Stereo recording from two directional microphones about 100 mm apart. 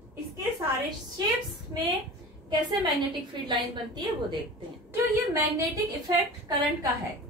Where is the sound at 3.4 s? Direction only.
45° right (ahead or behind).